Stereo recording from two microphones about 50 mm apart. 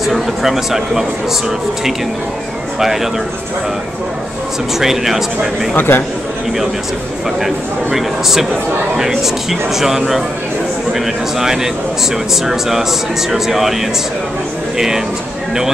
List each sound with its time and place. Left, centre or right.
0.0 s speech: centre
2.8 s speech: centre
4.7 s speech: centre
5.8 s speech: left
7.3 s speech: centre